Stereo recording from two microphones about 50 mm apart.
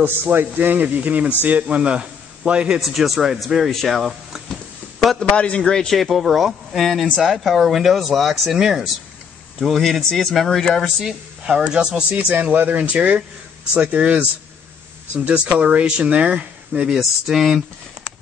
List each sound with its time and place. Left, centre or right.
0.0 s a man's voice: right
2.8 s speech: centre
5.3 s a man's voice: left
5.6 s speech: centre
11.0 s speech: centre
12.5 s a man's voice: right
12.8 s speech: right
16.8 s speech: centre